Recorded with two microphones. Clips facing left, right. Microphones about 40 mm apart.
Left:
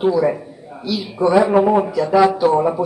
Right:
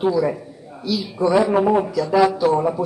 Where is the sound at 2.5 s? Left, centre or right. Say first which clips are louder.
Left 3 dB; centre.